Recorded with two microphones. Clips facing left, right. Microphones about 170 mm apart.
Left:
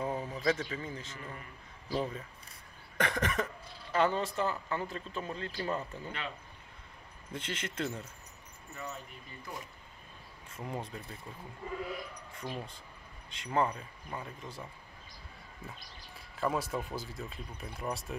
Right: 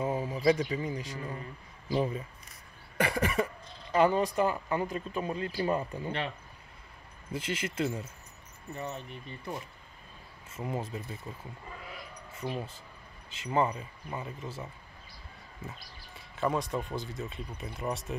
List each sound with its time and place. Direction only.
0.0 s speech: 10° right (ahead or behind)
1.1 s a man's voice: 35° right (ahead or behind)
1.9 s speech: 10° right (ahead or behind)
7.3 s speech: 10° right (ahead or behind)
8.7 s speech: 30° right (ahead or behind)
10.5 s speech: 5° right (ahead or behind)
12.4 s speech: 5° right (ahead or behind)
16.3 s speech: centre (ahead or behind)